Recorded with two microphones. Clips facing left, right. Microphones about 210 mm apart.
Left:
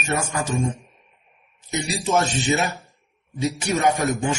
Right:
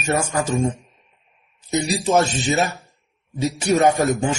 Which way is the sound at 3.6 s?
35° right (ahead or behind).